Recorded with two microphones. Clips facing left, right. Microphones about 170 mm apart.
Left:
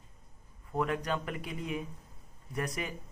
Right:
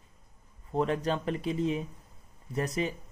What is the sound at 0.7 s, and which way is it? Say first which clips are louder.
A man's voice: right 4 dB; 25° right (ahead or behind).